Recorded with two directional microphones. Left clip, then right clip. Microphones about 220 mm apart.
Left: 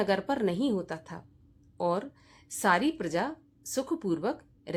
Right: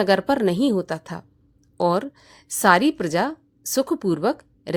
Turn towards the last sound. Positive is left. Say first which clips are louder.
# right 10 dB
turn(degrees=-35)  # may be behind; listen again after turning